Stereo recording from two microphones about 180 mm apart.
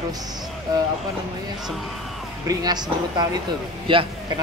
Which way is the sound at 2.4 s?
20° right (ahead or behind).